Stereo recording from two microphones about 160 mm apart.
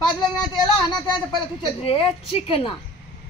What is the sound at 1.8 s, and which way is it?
Speech, 35° left (ahead or behind).